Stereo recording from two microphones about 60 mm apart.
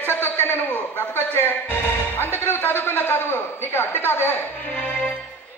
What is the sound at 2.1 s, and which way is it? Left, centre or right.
A man's voice, left.